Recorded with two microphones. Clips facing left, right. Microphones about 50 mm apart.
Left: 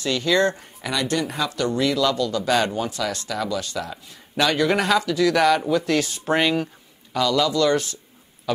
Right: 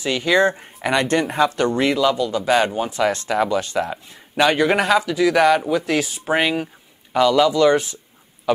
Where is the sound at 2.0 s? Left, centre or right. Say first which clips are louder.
Right 3 dB; centre.